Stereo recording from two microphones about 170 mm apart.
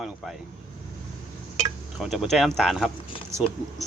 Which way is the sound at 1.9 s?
Centre (ahead or behind).